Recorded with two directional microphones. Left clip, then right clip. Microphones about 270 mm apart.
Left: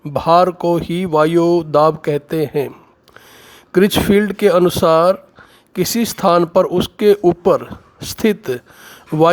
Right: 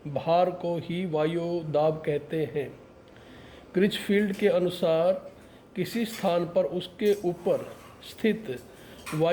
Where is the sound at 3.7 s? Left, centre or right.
Left.